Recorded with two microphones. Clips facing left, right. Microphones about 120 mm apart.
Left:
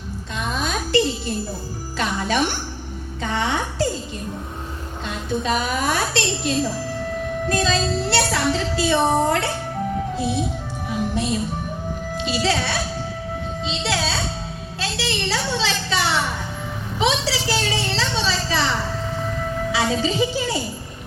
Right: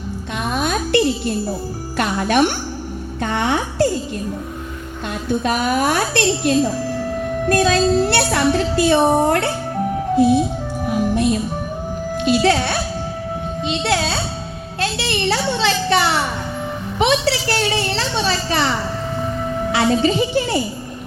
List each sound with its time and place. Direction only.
0.3 s music: 60° right (ahead or behind)
2.0 s a woman's voice: 60° right (ahead or behind)
5.0 s a woman's voice: 55° right (ahead or behind)
10.8 s music: 55° right (ahead or behind)
12.1 s a woman's voice: 55° right (ahead or behind)
17.0 s a sound: 60° right (ahead or behind)
19.9 s a woman's voice: 60° right (ahead or behind)
20.3 s a sound: 60° right (ahead or behind)